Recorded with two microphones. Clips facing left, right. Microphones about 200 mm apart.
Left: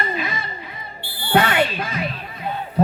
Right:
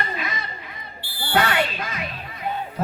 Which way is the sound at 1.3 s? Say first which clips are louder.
Left 4 dB; 25° left (ahead or behind).